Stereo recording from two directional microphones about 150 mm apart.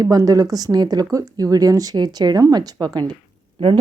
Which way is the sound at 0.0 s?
25° right (ahead or behind).